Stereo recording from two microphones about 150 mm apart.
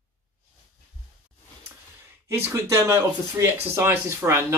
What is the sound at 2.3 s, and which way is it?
Speech, 15° right (ahead or behind).